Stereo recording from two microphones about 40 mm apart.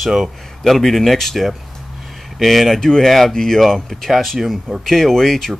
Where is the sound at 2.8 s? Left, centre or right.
Centre.